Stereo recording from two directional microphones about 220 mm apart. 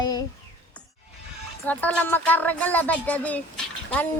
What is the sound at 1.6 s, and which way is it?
Child singing, 5° left (ahead or behind).